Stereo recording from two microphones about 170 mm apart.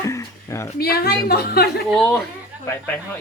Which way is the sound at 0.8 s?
65° left (ahead or behind).